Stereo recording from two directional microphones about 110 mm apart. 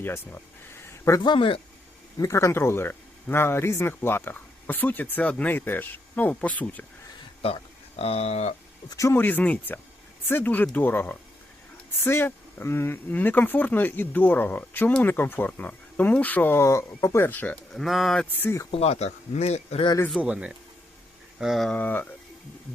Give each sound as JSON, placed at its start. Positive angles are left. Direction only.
{"t": 1.2, "sound": "speech", "side_deg": 45}
{"t": 2.1, "sound": "speech", "side_deg": 30}
{"t": 7.4, "sound": "speech", "side_deg": 65}
{"t": 8.9, "sound": "speech", "side_deg": 30}
{"t": 9.1, "sound": "speech", "side_deg": 15}
{"t": 17.7, "sound": "speech", "side_deg": 0}
{"t": 18.3, "sound": "speech", "side_deg": 25}
{"t": 18.7, "sound": "speech", "side_deg": 70}
{"t": 20.2, "sound": "speech", "side_deg": -10}
{"t": 21.8, "sound": "speech", "side_deg": 15}